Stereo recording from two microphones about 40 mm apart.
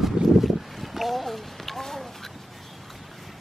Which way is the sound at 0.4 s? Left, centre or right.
Centre.